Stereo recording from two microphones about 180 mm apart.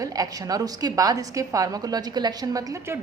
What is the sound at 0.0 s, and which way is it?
A woman's voice, 20° right (ahead or behind).